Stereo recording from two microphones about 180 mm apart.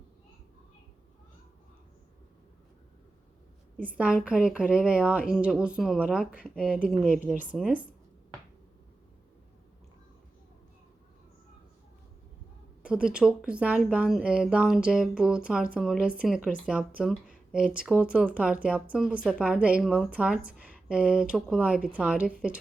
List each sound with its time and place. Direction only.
3.8 s a woman's voice: 10° right (ahead or behind)
12.8 s a woman's voice: 5° right (ahead or behind)